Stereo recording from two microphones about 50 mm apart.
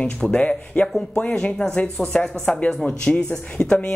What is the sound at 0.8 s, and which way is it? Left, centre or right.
Speech, centre.